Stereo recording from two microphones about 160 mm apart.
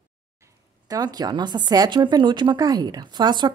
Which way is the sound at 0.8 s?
25° right (ahead or behind).